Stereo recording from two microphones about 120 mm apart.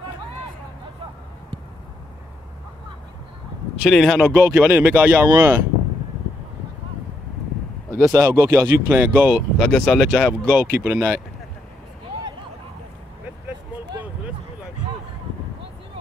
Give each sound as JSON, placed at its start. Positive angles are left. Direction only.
{"t": 3.8, "sound": "speech", "side_deg": 0}
{"t": 8.2, "sound": "speech", "side_deg": -15}
{"t": 9.6, "sound": "speech", "side_deg": 5}
{"t": 10.6, "sound": "speech", "side_deg": -15}